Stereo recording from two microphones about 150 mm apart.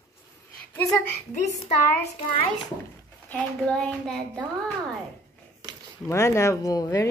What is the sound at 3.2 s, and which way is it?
A child's voice, 5° left (ahead or behind).